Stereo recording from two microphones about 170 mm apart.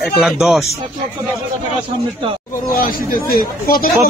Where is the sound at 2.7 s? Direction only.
55° left (ahead or behind).